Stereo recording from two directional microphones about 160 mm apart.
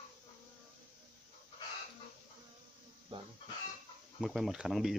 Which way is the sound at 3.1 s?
35° right (ahead or behind).